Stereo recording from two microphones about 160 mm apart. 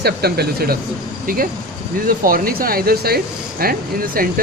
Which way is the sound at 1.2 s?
65° right (ahead or behind).